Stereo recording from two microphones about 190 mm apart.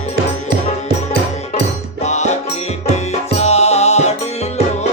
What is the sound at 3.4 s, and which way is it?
Music, 35° left (ahead or behind).